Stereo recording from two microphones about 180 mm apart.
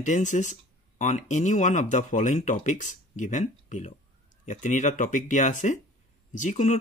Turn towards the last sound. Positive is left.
turn(degrees=45)  # may be behind; listen again after turning